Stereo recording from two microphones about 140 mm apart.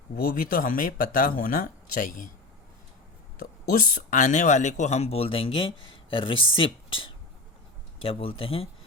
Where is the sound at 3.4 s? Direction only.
90° left; by 8.7 s 40° left (ahead or behind).